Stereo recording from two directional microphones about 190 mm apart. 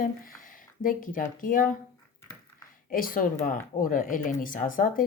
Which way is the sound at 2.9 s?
45° left (ahead or behind).